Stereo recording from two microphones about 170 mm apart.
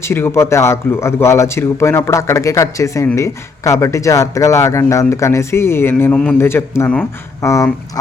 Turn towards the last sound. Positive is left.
turn(degrees=15)  # may be behind; listen again after turning